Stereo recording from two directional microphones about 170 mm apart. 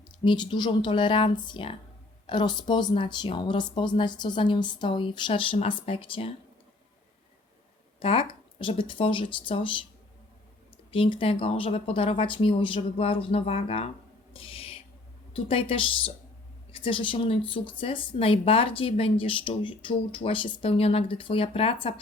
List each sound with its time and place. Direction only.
0.3 s speech: 25° left (ahead or behind)
7.9 s speech: 30° left (ahead or behind)
10.9 s speech: 30° left (ahead or behind)
14.3 s owl: 35° left (ahead or behind)
15.3 s speech: 35° left (ahead or behind)